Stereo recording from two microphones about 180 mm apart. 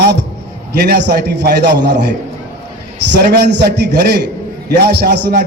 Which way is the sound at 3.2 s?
65° right (ahead or behind).